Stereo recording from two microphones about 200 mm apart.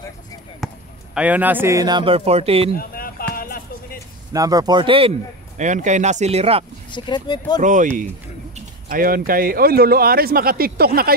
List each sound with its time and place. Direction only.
0.6 s basketball bounce: centre (ahead or behind)
1.1 s speech: 5° right (ahead or behind); by 2.7 s 30° right (ahead or behind)
2.7 s a sound: 45° left (ahead or behind)
4.3 s speech: 15° right (ahead or behind)
5.6 s speech: 35° right (ahead or behind)
6.9 s speech: 20° left (ahead or behind)
7.6 s speech: 40° right (ahead or behind)